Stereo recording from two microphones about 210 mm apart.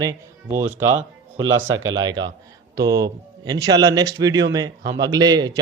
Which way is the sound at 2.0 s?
20° right (ahead or behind).